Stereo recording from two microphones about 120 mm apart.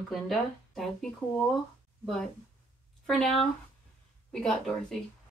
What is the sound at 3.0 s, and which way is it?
Speech, centre (ahead or behind).